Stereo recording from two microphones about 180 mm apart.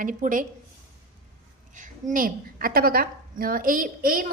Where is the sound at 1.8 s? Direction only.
45° right (ahead or behind).